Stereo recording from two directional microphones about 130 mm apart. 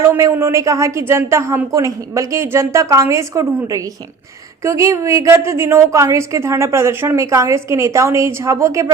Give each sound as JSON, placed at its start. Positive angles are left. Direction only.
{"t": 0.0, "sound": "a woman's voice", "side_deg": -20}